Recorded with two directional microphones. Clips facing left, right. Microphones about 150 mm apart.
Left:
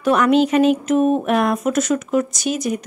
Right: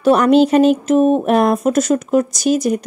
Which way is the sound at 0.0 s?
35° right (ahead or behind).